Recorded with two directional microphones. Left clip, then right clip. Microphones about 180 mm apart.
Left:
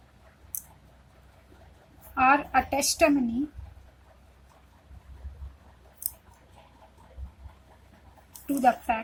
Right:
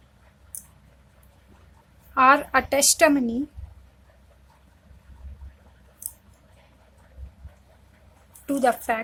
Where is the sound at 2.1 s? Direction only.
40° right (ahead or behind).